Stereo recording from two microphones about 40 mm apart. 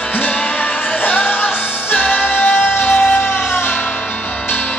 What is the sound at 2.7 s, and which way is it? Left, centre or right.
Music, left.